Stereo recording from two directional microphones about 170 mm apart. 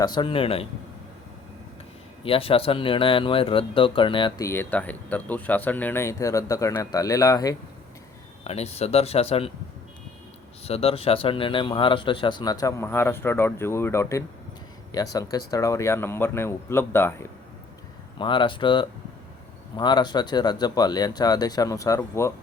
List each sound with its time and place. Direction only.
0.0 s speech: 25° left (ahead or behind)
2.2 s speech: 35° left (ahead or behind)
4.4 s speech: 10° left (ahead or behind)
8.4 s speech: 40° left (ahead or behind)
10.6 s a man's voice: 35° left (ahead or behind); by 17.2 s 15° left (ahead or behind)
18.2 s a man's voice: 30° left (ahead or behind)